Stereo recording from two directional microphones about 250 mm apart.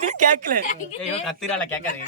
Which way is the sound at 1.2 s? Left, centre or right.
Centre.